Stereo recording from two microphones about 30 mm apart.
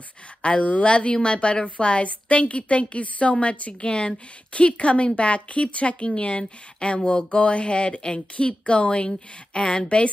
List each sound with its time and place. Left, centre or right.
0.6 s a woman's voice: left
0.8 s a woman's voice: left
3.8 s speech: left